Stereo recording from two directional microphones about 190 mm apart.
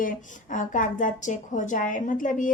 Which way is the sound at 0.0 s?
45° left (ahead or behind).